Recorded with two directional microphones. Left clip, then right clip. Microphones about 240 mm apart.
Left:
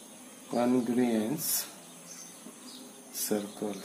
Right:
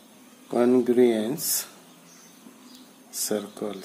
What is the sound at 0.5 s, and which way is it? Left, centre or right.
Speech, right.